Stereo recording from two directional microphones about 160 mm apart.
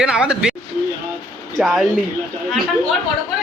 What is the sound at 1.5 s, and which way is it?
Speech, centre (ahead or behind).